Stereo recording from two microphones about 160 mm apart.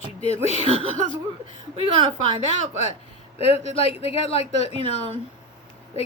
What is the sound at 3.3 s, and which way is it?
A woman's voice, 40° left (ahead or behind).